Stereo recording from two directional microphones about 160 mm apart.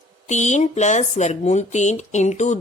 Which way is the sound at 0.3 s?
50° left (ahead or behind).